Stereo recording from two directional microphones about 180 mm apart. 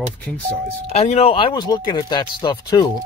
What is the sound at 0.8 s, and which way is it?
Speech, 35° left (ahead or behind).